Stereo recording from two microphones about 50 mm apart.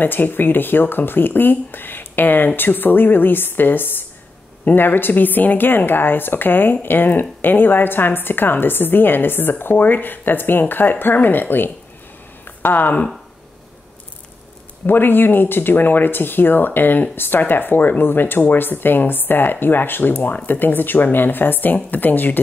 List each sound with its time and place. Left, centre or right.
0.0 s speech: left
12.4 s a sound: left
14.9 s speech: left